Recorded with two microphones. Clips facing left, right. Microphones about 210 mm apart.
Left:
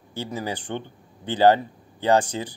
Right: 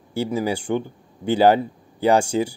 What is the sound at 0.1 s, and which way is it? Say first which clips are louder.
Speech: right 7 dB; 10° right (ahead or behind).